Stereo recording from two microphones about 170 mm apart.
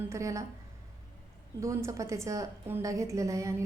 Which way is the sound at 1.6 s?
15° right (ahead or behind).